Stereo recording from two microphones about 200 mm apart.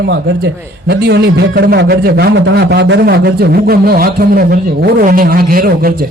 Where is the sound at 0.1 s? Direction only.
55° right (ahead or behind).